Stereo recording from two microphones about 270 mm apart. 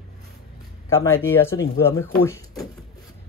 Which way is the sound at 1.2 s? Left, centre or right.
Centre.